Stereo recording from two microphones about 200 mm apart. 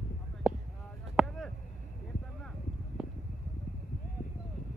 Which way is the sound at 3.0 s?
5° right (ahead or behind).